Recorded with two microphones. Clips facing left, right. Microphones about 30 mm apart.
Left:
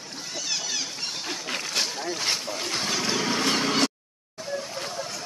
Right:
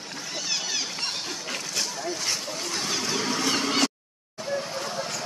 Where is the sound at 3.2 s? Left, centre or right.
Left.